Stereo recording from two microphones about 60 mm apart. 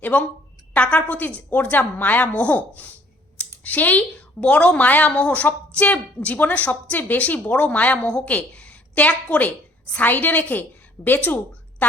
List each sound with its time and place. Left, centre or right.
0.0 s a woman's voice: left